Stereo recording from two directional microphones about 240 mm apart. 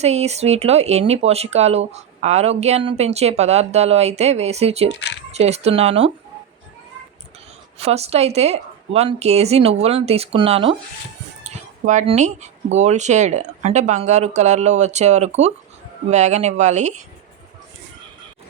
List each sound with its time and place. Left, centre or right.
0.0 s a woman's voice: right
7.8 s a woman's voice: right